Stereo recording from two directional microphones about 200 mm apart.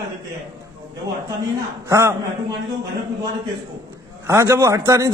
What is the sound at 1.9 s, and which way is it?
Speech, 15° right (ahead or behind).